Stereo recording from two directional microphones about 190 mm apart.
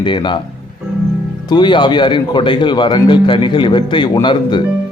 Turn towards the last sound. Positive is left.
turn(degrees=25)  # may be behind; listen again after turning